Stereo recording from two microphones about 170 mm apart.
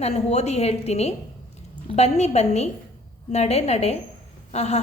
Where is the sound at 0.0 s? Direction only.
40° left (ahead or behind).